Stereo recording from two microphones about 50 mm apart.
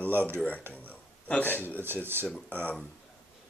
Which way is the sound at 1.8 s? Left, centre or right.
Right.